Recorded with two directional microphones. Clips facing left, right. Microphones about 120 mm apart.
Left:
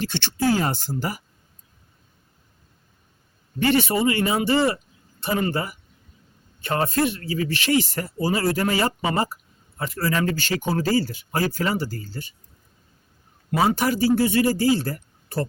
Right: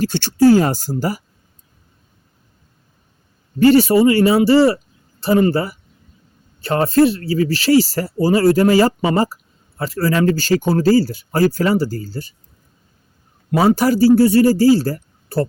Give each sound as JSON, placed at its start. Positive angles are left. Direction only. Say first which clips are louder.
{"t": 0.0, "sound": "speech", "louder": "right 10 dB", "side_deg": -40}
{"t": 3.6, "sound": "speech", "louder": "right 9 dB", "side_deg": -35}
{"t": 13.5, "sound": "speech", "louder": "right 7 dB", "side_deg": -35}